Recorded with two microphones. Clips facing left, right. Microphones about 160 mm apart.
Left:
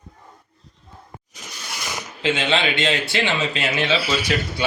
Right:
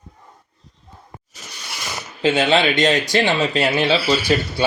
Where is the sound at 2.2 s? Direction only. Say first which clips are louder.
Right 5 dB; 40° right (ahead or behind).